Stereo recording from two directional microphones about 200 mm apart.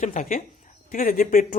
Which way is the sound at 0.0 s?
40° left (ahead or behind).